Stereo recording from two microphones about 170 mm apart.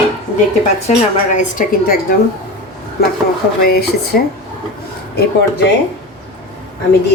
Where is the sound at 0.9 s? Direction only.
45° left (ahead or behind).